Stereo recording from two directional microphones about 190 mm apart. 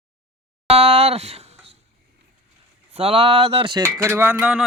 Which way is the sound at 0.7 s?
30° right (ahead or behind).